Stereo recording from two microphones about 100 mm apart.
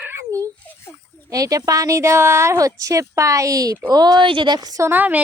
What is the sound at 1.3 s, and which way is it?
A woman's voice, 35° right (ahead or behind).